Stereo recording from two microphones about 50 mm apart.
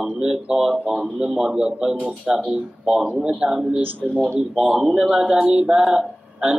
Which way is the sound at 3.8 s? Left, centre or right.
Right.